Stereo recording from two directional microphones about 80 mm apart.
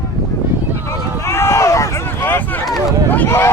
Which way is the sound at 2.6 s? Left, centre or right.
Centre.